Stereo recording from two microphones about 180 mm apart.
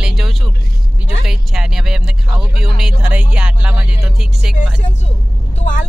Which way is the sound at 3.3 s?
5° right (ahead or behind).